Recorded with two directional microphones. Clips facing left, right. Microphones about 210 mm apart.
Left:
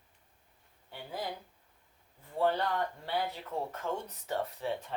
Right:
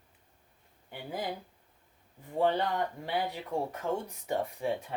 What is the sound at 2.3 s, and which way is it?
Speech, 15° right (ahead or behind).